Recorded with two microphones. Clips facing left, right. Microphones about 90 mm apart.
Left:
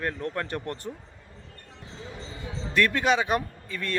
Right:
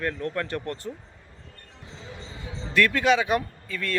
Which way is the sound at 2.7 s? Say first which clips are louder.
Right 2 dB; 20° left (ahead or behind).